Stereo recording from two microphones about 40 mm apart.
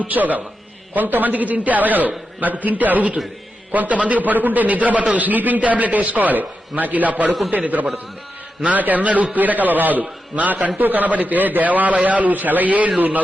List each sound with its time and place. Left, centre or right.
0.0 s a man's voice: right